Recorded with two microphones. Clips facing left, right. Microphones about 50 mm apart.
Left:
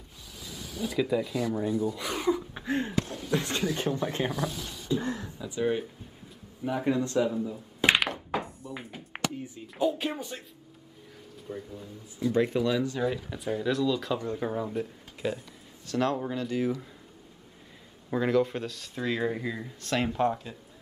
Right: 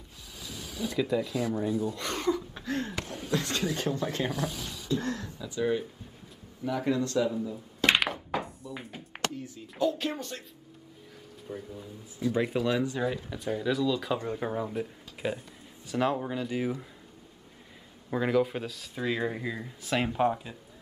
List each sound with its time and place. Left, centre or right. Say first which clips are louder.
0.9 s speech: left 1 dB; centre
3.0 s speech: left 5 dB; right
3.3 s a man's voice: right 1 dB; left
7.2 s speech: left 1 dB; centre
7.9 s thunk: even; centre
9.1 s speech: left 1 dB; left
11.4 s speech: left 1 dB; centre
12.5 s speech: left 1 dB; centre
13.0 s speech: left 1 dB; centre
18.1 s speech: left 1 dB; centre